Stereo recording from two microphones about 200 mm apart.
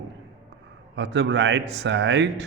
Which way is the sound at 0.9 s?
60° right (ahead or behind).